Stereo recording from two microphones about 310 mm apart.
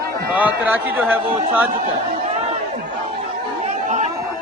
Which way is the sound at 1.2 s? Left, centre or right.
Centre.